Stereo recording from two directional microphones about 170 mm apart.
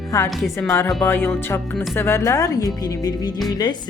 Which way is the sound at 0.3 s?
Centre (ahead or behind).